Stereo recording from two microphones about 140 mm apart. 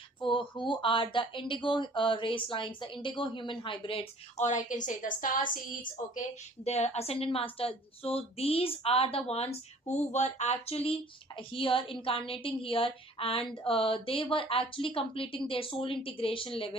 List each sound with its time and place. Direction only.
0.2 s speech: 35° left (ahead or behind)
4.4 s a woman's voice: 60° left (ahead or behind)
4.9 s a woman's voice: 75° left (ahead or behind); by 16.7 s 40° left (ahead or behind)